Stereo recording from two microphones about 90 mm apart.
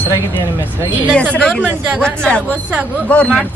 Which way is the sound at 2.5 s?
15° right (ahead or behind).